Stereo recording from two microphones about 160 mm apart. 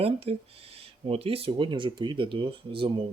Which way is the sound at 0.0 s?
40° right (ahead or behind).